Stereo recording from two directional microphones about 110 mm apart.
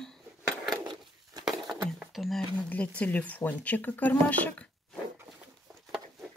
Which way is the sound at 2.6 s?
10° left (ahead or behind).